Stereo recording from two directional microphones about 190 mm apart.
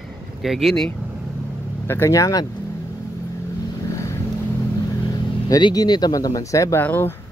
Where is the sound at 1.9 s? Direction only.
15° left (ahead or behind).